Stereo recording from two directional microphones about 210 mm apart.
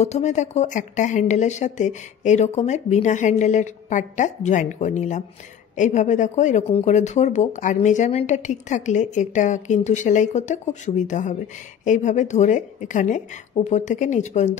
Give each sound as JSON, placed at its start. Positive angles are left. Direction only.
{"t": 0.0, "sound": "speech", "side_deg": 35}